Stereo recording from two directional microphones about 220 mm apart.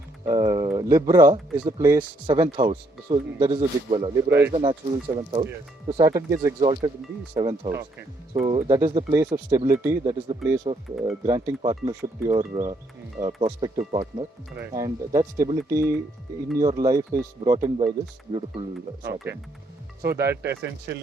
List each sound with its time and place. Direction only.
0.3 s speech: 15° right (ahead or behind)
4.5 s speech: 20° right (ahead or behind)
14.6 s speech: 15° right (ahead or behind)
20.0 s speech: 45° right (ahead or behind)